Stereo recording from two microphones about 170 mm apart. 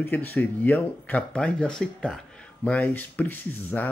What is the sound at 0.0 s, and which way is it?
Speech, 10° left (ahead or behind).